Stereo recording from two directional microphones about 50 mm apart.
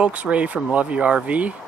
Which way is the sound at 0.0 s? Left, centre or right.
Right.